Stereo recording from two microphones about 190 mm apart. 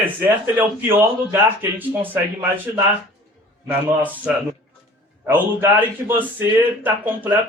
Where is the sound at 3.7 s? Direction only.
10° right (ahead or behind).